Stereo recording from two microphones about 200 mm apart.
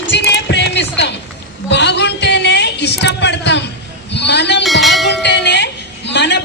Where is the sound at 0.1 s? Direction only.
60° left (ahead or behind).